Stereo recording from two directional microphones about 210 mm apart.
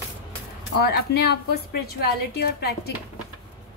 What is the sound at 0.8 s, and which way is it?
A woman's voice, 50° left (ahead or behind).